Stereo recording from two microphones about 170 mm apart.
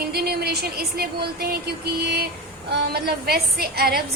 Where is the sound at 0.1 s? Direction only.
70° right (ahead or behind).